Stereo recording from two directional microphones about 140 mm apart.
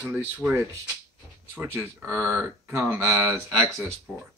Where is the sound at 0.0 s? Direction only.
10° right (ahead or behind).